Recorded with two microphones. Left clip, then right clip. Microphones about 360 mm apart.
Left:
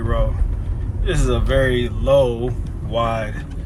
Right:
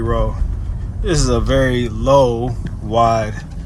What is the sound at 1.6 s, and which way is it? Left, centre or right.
Speech, right.